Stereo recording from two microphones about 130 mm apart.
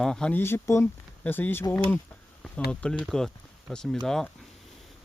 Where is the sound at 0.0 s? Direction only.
5° left (ahead or behind).